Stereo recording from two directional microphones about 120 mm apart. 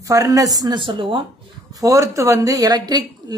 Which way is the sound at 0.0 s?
30° right (ahead or behind).